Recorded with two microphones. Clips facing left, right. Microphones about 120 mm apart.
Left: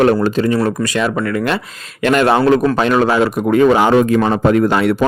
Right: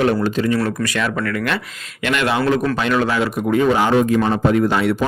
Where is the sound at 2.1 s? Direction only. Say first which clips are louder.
Left 6 dB; 40° left (ahead or behind).